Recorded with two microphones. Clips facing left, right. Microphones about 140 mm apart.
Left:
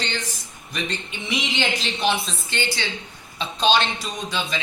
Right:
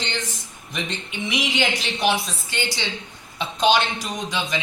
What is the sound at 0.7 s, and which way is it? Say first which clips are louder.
A woman's voice: left 1 dB; 20° right (ahead or behind).